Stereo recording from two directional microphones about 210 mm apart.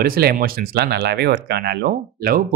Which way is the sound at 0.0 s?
45° right (ahead or behind).